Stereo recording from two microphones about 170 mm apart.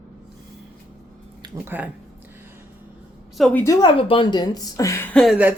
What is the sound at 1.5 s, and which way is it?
Speech, 10° right (ahead or behind).